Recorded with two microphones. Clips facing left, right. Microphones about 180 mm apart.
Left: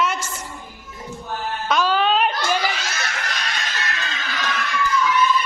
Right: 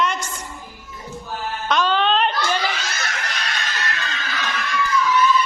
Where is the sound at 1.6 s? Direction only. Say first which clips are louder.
Even; 5° left (ahead or behind).